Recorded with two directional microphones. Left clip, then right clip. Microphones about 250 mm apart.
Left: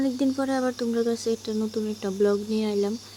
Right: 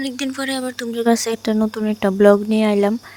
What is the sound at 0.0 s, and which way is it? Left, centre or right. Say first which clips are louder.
Speech: right 1 dB; right.